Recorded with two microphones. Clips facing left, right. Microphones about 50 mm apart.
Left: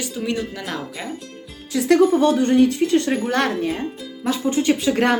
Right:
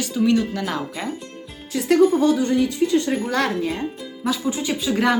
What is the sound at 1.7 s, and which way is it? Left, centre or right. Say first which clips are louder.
Speech: left 1 dB; left.